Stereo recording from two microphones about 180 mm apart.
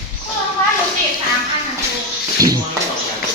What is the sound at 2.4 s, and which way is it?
Speech, 20° right (ahead or behind).